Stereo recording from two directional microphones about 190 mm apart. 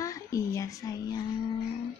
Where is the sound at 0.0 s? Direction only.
15° left (ahead or behind).